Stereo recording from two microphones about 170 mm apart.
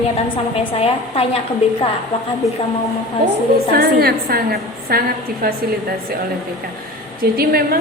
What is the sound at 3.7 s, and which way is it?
A woman's voice, 65° right (ahead or behind).